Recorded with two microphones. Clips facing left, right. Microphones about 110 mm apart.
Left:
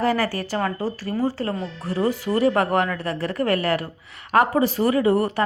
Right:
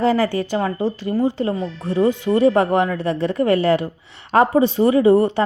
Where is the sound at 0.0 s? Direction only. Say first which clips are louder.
Right 4 dB; 20° right (ahead or behind).